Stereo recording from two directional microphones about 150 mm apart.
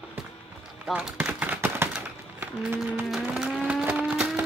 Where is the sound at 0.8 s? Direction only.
5° right (ahead or behind).